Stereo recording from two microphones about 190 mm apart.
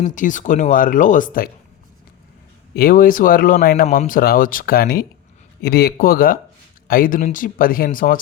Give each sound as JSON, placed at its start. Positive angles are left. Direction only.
{"t": 0.0, "sound": "speech", "side_deg": 40}
{"t": 2.7, "sound": "speech", "side_deg": 50}